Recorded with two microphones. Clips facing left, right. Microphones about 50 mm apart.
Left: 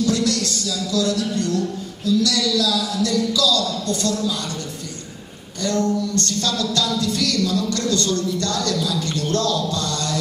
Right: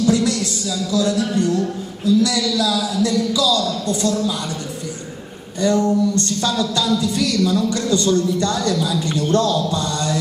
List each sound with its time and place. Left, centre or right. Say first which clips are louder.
0.0 s speech: right 3 dB; centre
5.6 s music: right 4 dB; centre